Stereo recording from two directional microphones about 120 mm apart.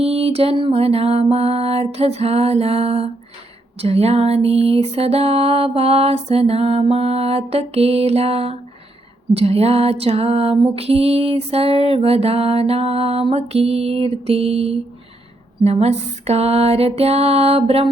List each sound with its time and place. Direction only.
0.0 s music: 55° right (ahead or behind)